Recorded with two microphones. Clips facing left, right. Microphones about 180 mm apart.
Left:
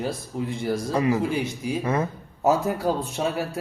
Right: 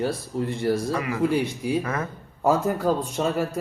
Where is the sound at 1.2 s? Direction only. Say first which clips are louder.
Right 3 dB; centre (ahead or behind).